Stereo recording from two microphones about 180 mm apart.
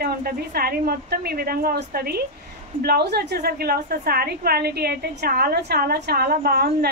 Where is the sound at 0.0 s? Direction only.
60° right (ahead or behind).